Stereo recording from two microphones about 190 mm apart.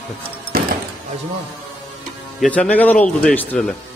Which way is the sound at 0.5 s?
50° right (ahead or behind).